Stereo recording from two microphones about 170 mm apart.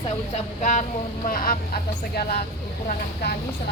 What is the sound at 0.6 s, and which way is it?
Speech, 45° left (ahead or behind).